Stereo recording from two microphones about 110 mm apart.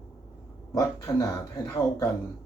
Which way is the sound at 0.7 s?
30° left (ahead or behind).